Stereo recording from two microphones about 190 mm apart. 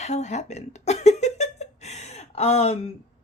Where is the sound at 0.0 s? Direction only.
35° left (ahead or behind).